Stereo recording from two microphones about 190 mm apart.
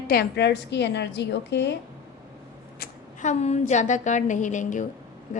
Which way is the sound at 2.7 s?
55° left (ahead or behind).